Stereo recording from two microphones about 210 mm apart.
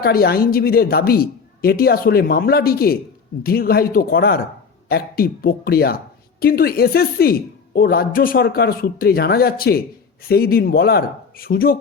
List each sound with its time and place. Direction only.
0.0 s speech: 45° left (ahead or behind)